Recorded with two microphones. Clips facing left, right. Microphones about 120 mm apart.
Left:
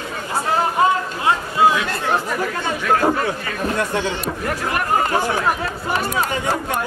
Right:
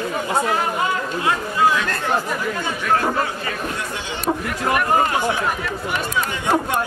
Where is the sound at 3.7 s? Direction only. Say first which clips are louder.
Left 8 dB; 50° left (ahead or behind).